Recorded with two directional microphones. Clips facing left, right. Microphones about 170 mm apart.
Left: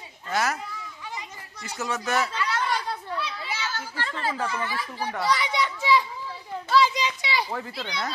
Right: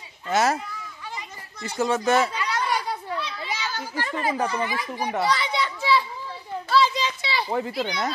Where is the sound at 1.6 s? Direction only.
30° right (ahead or behind).